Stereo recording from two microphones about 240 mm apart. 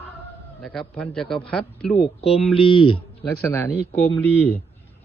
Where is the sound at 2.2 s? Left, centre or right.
Left.